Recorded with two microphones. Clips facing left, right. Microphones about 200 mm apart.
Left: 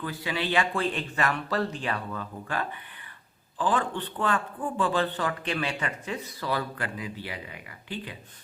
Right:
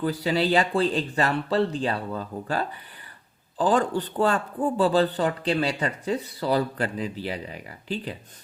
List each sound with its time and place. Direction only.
0.0 s speech: 35° right (ahead or behind)